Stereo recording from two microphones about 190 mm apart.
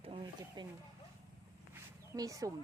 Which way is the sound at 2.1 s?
15° right (ahead or behind).